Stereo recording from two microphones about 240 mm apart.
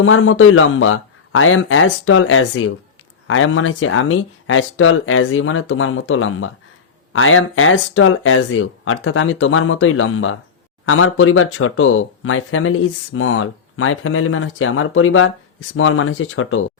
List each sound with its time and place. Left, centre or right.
0.0 s speech: left